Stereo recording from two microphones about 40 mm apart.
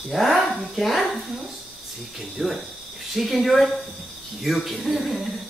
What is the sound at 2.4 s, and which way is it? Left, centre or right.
Speech, centre.